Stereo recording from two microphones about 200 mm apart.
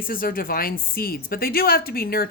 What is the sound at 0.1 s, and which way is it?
A woman's voice, 45° left (ahead or behind).